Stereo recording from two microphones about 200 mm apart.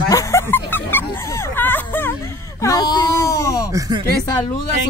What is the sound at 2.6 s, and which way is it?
Speech, 20° left (ahead or behind).